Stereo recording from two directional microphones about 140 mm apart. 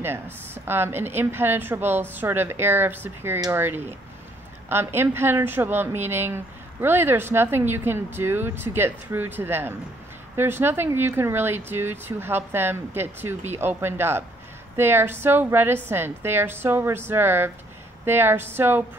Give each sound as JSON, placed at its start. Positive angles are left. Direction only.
{"t": 0.7, "sound": "a woman's voice", "side_deg": -15}